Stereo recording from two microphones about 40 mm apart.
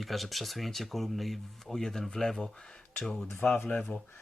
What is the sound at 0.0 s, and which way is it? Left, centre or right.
Speech, centre.